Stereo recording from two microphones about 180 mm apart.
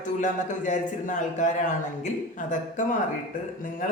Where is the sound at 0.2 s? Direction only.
45° left (ahead or behind).